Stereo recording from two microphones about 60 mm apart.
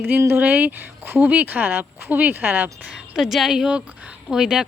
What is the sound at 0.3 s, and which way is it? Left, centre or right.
Speech, right.